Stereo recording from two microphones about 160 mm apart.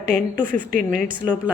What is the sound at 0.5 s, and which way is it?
Speech, 55° right (ahead or behind).